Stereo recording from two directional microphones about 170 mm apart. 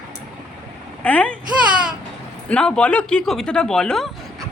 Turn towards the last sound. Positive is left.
turn(degrees=5)  # may be behind; listen again after turning